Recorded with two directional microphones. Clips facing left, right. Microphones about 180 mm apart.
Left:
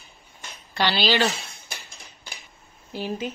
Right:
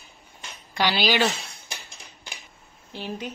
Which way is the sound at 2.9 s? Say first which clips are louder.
Left 4 dB; 10° left (ahead or behind).